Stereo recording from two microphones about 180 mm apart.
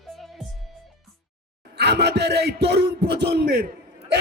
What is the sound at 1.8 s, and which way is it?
A man's voice, 70° right (ahead or behind).